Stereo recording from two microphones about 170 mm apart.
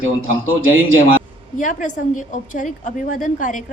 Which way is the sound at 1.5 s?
50° left (ahead or behind).